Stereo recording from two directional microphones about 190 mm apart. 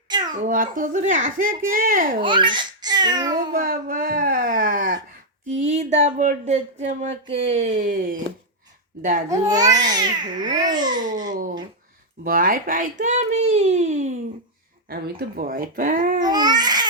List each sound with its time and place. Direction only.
0.3 s speech: 45° right (ahead or behind)
2.2 s a child's voice: 25° right (ahead or behind)
3.3 s speech: 50° right (ahead or behind)
5.5 s a child's voice: 35° right (ahead or behind)
9.6 s a child's voice: 20° right (ahead or behind)
11.3 s a child's voice: 45° right (ahead or behind)
14.8 s speech: 55° right (ahead or behind)
16.2 s a child's voice: 20° right (ahead or behind)